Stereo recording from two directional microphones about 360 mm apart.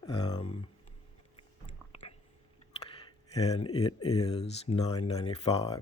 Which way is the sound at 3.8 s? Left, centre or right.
Centre.